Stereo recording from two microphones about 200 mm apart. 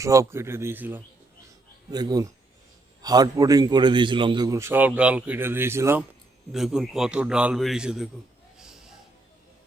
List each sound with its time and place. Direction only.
0.0 s a man's voice: 15° right (ahead or behind)